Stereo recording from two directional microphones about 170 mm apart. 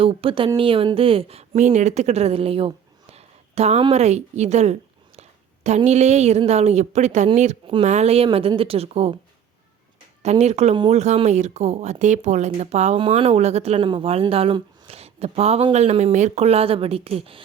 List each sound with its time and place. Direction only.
0.0 s speech: 35° right (ahead or behind)
10.2 s speech: 40° right (ahead or behind)